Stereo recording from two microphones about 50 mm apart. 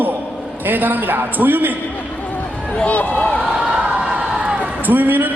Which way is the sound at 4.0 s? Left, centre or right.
Right.